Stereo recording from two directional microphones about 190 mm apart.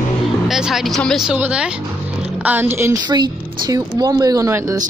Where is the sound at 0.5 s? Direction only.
Centre (ahead or behind).